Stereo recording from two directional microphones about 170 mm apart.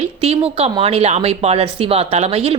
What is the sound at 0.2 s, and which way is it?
A woman's voice, 35° right (ahead or behind).